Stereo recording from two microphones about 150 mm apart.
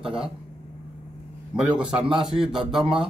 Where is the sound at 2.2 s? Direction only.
5° right (ahead or behind).